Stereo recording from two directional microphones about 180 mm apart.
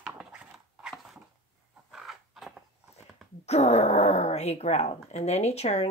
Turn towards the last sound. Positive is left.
turn(degrees=35)  # may be behind; listen again after turning